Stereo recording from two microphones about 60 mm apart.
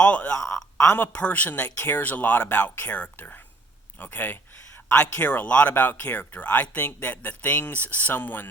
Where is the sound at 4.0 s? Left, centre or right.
Left.